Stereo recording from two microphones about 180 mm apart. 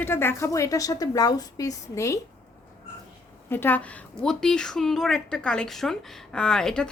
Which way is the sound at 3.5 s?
10° left (ahead or behind).